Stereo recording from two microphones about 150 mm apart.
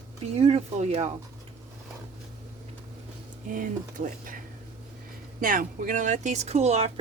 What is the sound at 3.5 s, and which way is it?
Speech, 60° right (ahead or behind).